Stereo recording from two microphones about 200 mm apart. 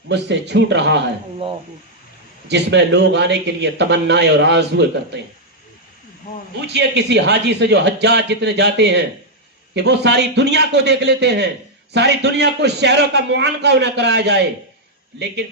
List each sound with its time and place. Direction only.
0.1 s a man's voice: 60° right (ahead or behind)
2.5 s a man's voice: 60° right (ahead or behind)
6.7 s a man's voice: 60° right (ahead or behind)